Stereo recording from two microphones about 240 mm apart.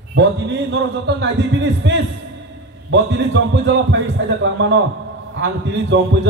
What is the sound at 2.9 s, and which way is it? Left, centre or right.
A man's voice, right.